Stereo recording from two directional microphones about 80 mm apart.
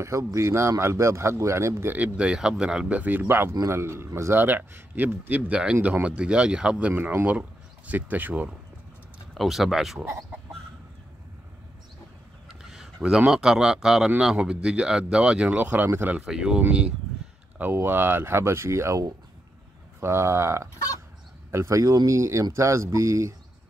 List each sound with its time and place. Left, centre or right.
0.0 s a man's voice: right
2.1 s speech: centre
3.0 s a man's voice: right
5.5 s speech: centre
5.8 s speech: right
9.3 s speech: centre
12.4 s a sound: centre
13.3 s speech: centre
17.6 s a man's voice: right